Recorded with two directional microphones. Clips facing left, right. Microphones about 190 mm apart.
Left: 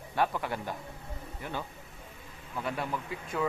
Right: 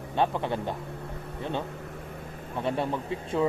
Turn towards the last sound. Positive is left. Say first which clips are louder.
# right 6 dB
turn(degrees=-30)  # may be behind; listen again after turning